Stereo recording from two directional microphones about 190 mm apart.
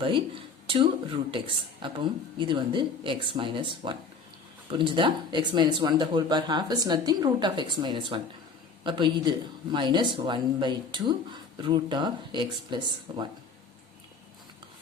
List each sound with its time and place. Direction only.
0.0 s speech: 30° right (ahead or behind)